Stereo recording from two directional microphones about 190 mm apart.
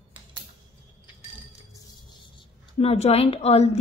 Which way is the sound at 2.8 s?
30° left (ahead or behind).